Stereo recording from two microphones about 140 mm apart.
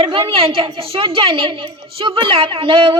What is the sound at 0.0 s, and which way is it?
A woman's voice, 40° right (ahead or behind).